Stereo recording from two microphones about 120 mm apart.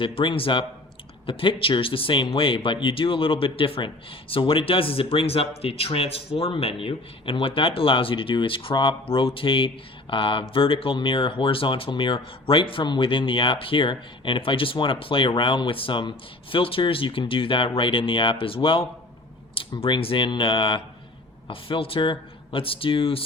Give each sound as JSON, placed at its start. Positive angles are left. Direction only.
{"t": 0.0, "sound": "speech", "side_deg": 45}